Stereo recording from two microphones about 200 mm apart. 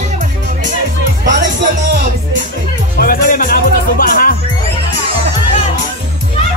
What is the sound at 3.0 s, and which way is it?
Music, 45° left (ahead or behind).